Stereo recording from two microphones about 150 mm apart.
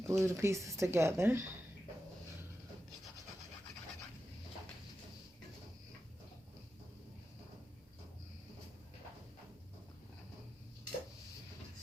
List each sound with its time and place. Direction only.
0.1 s speech: 20° right (ahead or behind)